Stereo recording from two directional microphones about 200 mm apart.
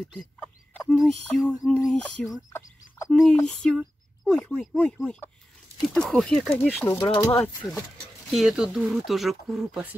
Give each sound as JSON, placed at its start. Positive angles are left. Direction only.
{"t": 0.2, "sound": "speech", "side_deg": 5}
{"t": 1.5, "sound": "a sound", "side_deg": 15}
{"t": 1.9, "sound": "speech", "side_deg": 0}
{"t": 6.8, "sound": "a sound", "side_deg": 10}
{"t": 7.1, "sound": "speech", "side_deg": 20}
{"t": 8.3, "sound": "speech", "side_deg": 0}